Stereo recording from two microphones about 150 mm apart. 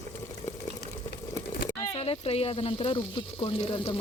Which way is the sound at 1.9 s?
40° left (ahead or behind).